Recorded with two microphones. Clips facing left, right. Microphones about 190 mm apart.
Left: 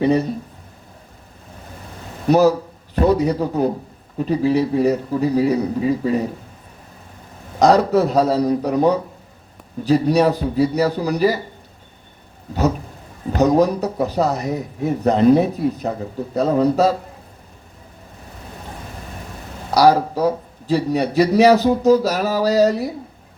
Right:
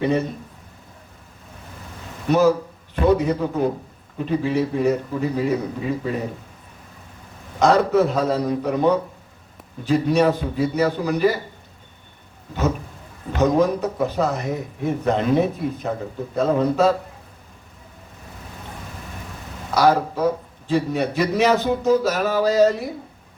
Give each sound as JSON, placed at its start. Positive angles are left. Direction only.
{"t": 0.0, "sound": "a man's voice", "side_deg": 35}
{"t": 2.2, "sound": "a man's voice", "side_deg": 40}
{"t": 7.6, "sound": "a man's voice", "side_deg": 40}
{"t": 13.3, "sound": "a man's voice", "side_deg": 35}
{"t": 19.7, "sound": "a man's voice", "side_deg": 35}